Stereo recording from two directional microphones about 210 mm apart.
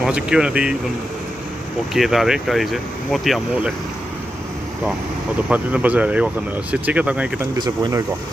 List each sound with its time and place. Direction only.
0.0 s speech: 5° right (ahead or behind)
2.0 s speech: centre (ahead or behind)
5.5 s speech: 5° right (ahead or behind)
7.5 s speech: 20° right (ahead or behind)